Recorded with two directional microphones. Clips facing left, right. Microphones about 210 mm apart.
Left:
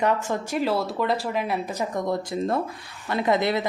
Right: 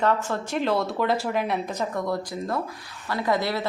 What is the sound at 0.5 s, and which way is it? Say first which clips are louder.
Speech: right 1 dB; 5° left (ahead or behind).